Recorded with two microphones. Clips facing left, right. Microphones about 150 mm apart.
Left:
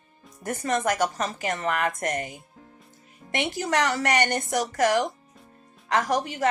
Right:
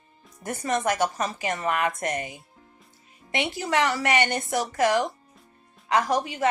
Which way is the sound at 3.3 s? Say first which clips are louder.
Even; 45° left (ahead or behind).